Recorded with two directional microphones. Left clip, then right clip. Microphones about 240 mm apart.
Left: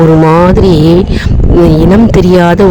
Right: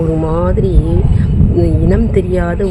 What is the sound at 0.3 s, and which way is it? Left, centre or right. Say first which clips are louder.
Speech: left 10 dB; left.